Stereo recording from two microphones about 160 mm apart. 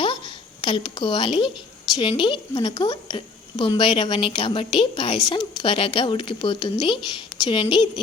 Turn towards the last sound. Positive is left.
turn(degrees=30)  # may be behind; listen again after turning